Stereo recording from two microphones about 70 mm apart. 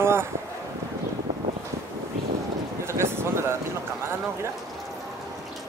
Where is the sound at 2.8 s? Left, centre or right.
Right.